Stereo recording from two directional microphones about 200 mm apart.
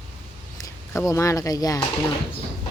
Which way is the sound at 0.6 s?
15° left (ahead or behind).